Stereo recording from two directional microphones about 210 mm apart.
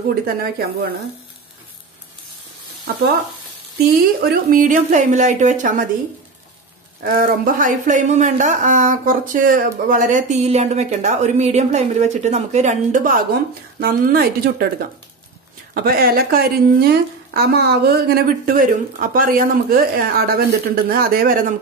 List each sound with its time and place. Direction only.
0.1 s speech: 45° right (ahead or behind)
4.2 s speech: 45° right (ahead or behind)
7.0 s speech: 45° right (ahead or behind)